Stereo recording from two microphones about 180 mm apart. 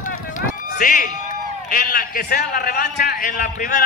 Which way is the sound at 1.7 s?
50° left (ahead or behind).